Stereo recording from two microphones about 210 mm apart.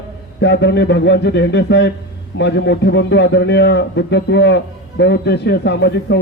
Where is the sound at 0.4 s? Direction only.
55° left (ahead or behind).